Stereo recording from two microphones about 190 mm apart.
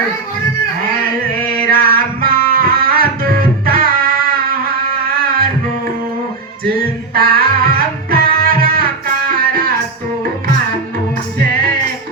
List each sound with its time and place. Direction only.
1.5 s music: 50° right (ahead or behind)
6.7 s music: 50° right (ahead or behind)
11.3 s music: 50° right (ahead or behind)